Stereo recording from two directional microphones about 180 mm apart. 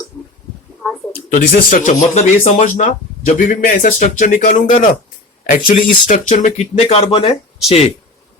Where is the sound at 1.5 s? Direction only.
45° left (ahead or behind).